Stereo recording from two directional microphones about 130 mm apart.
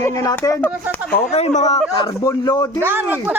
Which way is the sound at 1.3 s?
60° left (ahead or behind).